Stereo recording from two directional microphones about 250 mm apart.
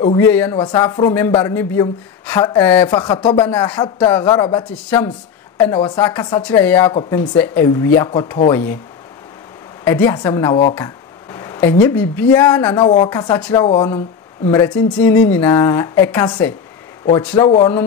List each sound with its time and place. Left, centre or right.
0.0 s speech: centre
4.8 s speech: centre
5.7 s speech: centre
9.8 s speech: centre
17.4 s speech: left